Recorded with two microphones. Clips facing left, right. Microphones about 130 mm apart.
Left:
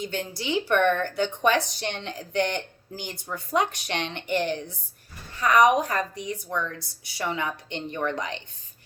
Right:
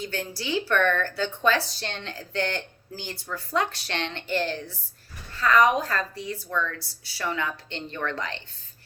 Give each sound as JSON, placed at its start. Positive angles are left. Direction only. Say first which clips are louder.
{"t": 0.0, "sound": "a woman's voice", "louder": "left 1 dB", "side_deg": 20}